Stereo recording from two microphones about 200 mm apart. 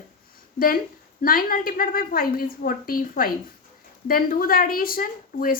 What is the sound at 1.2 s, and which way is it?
Speech, 45° left (ahead or behind).